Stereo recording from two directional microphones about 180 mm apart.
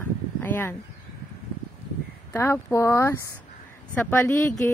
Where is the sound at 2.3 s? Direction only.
15° left (ahead or behind).